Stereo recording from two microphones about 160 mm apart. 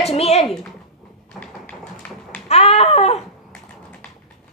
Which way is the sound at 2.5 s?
40° left (ahead or behind).